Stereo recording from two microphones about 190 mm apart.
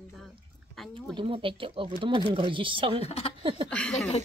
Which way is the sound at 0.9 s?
25° right (ahead or behind).